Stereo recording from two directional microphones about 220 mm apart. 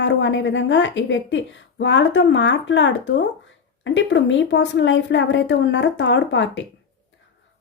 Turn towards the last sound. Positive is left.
turn(degrees=55)  # may be behind; listen again after turning